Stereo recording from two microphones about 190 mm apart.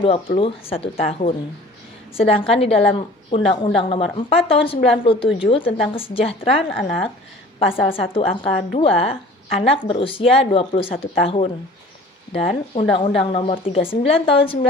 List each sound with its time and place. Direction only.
0.3 s a woman's voice: 30° left (ahead or behind)
7.6 s a woman's voice: 30° left (ahead or behind)